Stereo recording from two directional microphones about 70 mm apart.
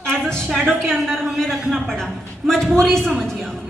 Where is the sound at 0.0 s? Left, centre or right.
Centre.